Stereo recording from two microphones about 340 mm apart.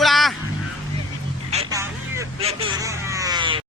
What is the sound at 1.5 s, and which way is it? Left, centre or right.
Vehicle, centre.